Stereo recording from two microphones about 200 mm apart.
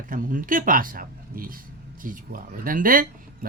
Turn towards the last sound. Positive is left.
turn(degrees=-45)  # may be behind; listen again after turning